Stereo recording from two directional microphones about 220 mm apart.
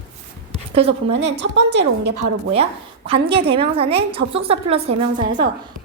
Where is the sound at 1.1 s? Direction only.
50° right (ahead or behind).